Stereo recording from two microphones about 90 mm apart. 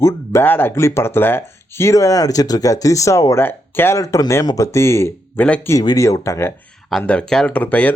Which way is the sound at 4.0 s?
40° left (ahead or behind).